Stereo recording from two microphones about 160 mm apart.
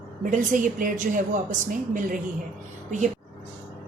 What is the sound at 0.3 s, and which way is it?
A woman's voice, 55° right (ahead or behind).